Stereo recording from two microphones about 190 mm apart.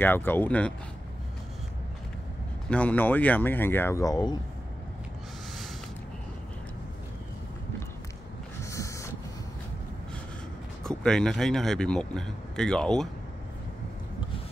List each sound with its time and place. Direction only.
0.0 s speech: 10° left (ahead or behind)
2.7 s speech: 10° left (ahead or behind)
8.5 s a sound: 15° left (ahead or behind)
10.8 s speech: 5° left (ahead or behind)